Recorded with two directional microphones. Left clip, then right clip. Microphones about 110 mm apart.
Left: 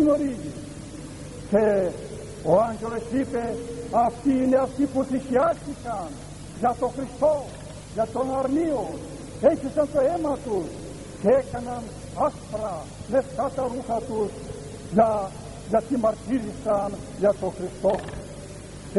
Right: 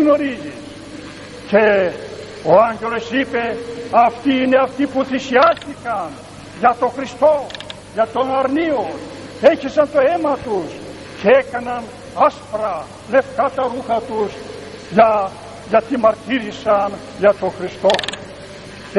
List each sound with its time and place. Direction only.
0.0 s a man's voice: 20° left (ahead or behind)
1.5 s a man's voice: 20° left (ahead or behind)